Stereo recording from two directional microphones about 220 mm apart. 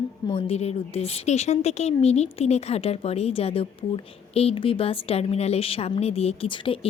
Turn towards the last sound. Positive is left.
turn(degrees=25)  # may be behind; listen again after turning